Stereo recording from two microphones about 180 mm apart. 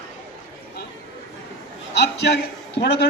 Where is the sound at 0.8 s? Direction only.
65° left (ahead or behind).